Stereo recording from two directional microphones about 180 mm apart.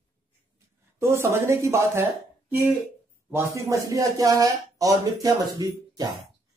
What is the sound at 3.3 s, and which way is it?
A man's voice, 15° right (ahead or behind).